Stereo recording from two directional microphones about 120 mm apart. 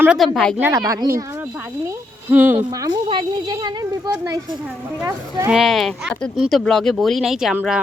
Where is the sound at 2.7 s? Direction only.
30° right (ahead or behind).